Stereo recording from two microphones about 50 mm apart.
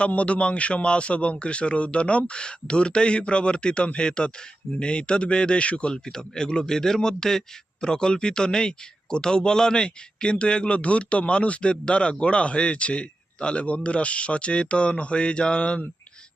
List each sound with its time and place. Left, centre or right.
0.1 s a man's voice: left